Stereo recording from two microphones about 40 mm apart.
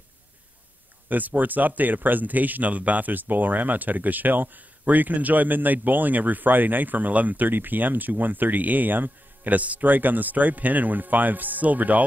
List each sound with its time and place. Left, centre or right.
1.0 s speech: right